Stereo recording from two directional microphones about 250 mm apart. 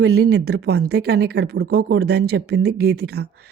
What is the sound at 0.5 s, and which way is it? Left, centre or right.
Speech, right.